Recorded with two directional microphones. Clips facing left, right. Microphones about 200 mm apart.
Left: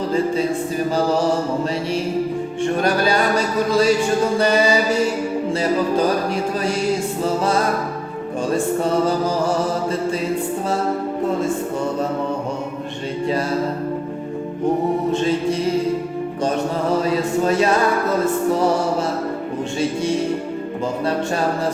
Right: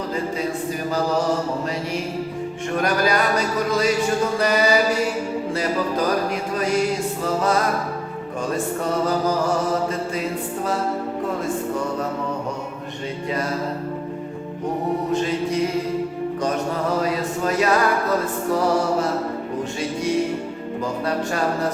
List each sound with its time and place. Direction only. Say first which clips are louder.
2.8 s music: even; 30° left (ahead or behind)
8.5 s music: left 5 dB; 30° left (ahead or behind)
15.1 s music: left 3 dB; 30° left (ahead or behind)
17.0 s chant: left 4 dB; 30° left (ahead or behind)